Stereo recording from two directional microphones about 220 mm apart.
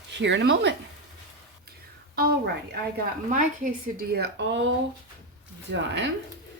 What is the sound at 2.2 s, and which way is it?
Speech, 45° right (ahead or behind).